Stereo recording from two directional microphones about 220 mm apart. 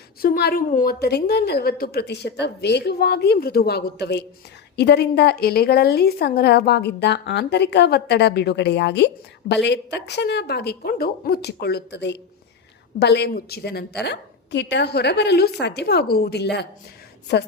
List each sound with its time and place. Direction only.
0.2 s a woman's voice: 45° left (ahead or behind)